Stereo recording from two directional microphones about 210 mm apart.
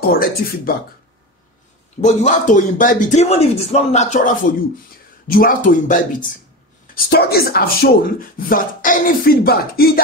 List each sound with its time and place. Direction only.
0.0 s speech: 45° left (ahead or behind)
2.0 s speech: 35° left (ahead or behind)
7.1 s speech: 50° left (ahead or behind)